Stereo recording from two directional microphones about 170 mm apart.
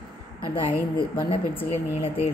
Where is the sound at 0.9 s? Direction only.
30° left (ahead or behind).